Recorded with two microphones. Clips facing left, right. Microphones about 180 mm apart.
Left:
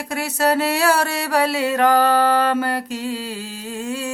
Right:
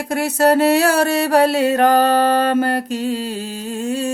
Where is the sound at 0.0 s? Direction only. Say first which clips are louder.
Right 5 dB; 50° right (ahead or behind).